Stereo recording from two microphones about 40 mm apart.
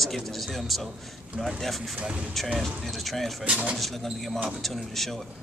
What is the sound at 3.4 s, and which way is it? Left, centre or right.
Speech, right.